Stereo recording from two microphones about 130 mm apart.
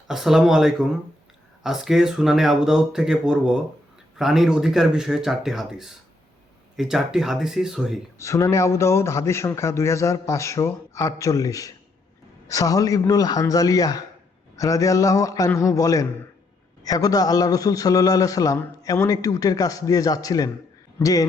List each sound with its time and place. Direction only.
0.1 s speech: centre (ahead or behind)
8.2 s a man's voice: 20° left (ahead or behind)